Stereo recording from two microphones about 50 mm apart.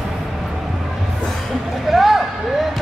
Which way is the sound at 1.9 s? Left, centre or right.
Centre.